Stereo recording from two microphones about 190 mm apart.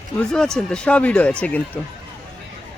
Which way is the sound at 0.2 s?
5° left (ahead or behind).